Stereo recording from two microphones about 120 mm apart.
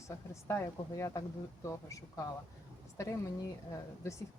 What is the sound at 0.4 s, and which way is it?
Speech, 25° left (ahead or behind).